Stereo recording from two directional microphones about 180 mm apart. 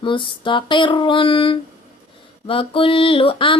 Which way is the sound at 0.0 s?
30° left (ahead or behind).